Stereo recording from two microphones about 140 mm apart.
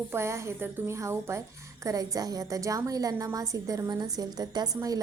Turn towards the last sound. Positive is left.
turn(degrees=-25)  # may be behind; listen again after turning